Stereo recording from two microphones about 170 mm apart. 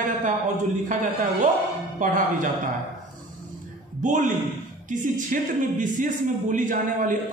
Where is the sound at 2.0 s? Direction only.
50° right (ahead or behind).